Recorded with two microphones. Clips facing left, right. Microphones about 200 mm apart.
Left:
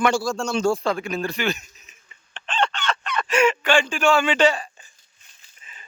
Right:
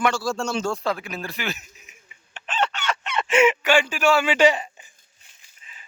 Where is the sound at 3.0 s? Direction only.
25° right (ahead or behind).